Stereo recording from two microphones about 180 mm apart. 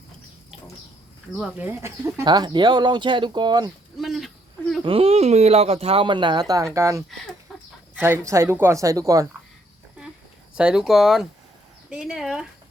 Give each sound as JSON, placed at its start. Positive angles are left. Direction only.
{"t": 1.4, "sound": "speech", "side_deg": -10}
{"t": 3.9, "sound": "speech", "side_deg": 0}
{"t": 4.8, "sound": "speech", "side_deg": -30}
{"t": 7.5, "sound": "chicken", "side_deg": 0}
{"t": 7.9, "sound": "speech", "side_deg": -10}
{"t": 10.5, "sound": "speech", "side_deg": -5}